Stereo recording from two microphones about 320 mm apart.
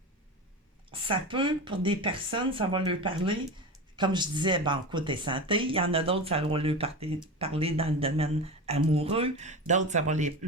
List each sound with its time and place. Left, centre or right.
0.9 s speech: centre